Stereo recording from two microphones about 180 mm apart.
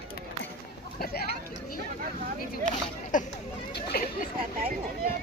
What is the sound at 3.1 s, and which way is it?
Speech, 45° left (ahead or behind).